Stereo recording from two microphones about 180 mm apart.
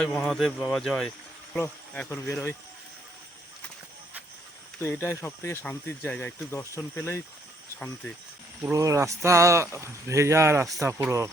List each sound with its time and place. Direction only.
0.0 s speech: 5° left (ahead or behind)
4.8 s speech: 15° left (ahead or behind)
8.7 s speech: 15° right (ahead or behind)